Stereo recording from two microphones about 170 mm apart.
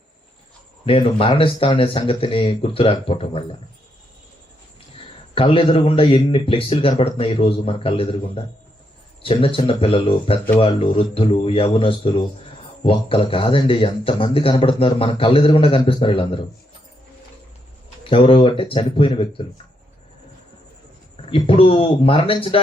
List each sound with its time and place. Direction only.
0.9 s speech: 35° left (ahead or behind)
5.3 s speech: 30° left (ahead or behind)
18.0 s speech: 35° left (ahead or behind)
21.2 s speech: 30° left (ahead or behind)